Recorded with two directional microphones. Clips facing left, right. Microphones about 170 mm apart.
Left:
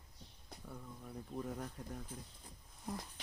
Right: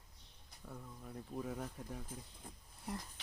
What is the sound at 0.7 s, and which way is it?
Speech, 5° right (ahead or behind).